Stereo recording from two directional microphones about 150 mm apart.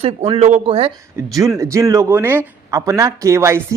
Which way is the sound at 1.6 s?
20° right (ahead or behind).